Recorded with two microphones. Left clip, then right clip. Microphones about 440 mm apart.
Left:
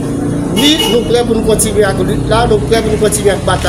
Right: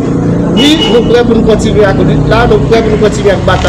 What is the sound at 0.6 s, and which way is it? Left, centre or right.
A man's voice, left.